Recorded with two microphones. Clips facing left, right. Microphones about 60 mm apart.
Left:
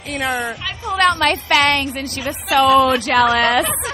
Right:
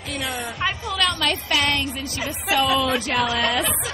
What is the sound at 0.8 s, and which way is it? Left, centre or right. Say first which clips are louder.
Speech: left 11 dB; left.